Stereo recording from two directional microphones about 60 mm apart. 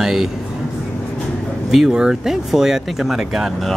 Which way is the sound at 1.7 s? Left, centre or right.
Centre.